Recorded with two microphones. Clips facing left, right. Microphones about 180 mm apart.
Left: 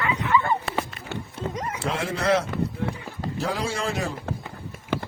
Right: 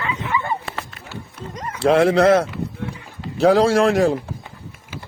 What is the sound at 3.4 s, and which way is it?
Speech, 85° right.